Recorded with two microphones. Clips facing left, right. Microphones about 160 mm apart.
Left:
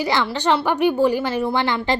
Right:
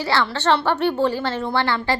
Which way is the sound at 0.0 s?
15° left (ahead or behind).